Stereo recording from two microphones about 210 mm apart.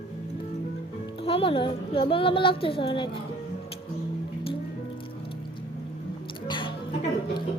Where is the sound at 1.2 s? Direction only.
25° left (ahead or behind).